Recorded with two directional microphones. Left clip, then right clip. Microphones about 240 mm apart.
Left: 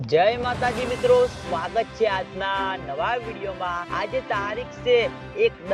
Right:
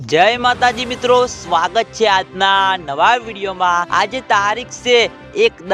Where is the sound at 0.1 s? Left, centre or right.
Right.